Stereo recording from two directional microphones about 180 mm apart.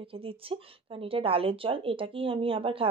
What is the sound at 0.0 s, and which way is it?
Speech, 30° right (ahead or behind).